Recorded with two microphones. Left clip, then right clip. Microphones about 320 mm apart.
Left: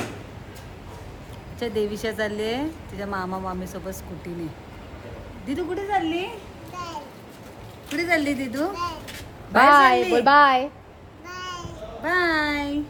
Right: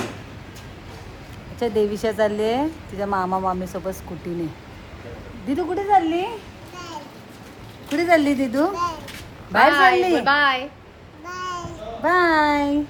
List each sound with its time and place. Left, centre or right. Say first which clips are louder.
1.5 s a woman's voice: right 5 dB; centre
5.5 s a woman's voice: right 7 dB; centre
7.9 s a woman's voice: right 5 dB; centre
8.7 s a woman's voice: right 5 dB; centre
9.7 s a woman's voice: even; left
10.0 s a woman's voice: right 1 dB; centre
10.2 s a woman's voice: left 3 dB; left
11.3 s babbling: right 5 dB; centre
12.0 s a woman's voice: right 5 dB; centre